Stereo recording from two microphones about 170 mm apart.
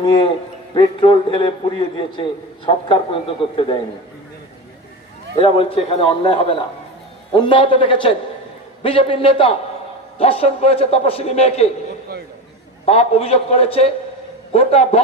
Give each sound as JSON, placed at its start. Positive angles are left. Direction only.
{"t": 0.0, "sound": "a man's voice", "side_deg": 25}
{"t": 1.3, "sound": "a man's voice", "side_deg": 30}
{"t": 5.3, "sound": "a man's voice", "side_deg": 35}
{"t": 12.8, "sound": "a man's voice", "side_deg": 35}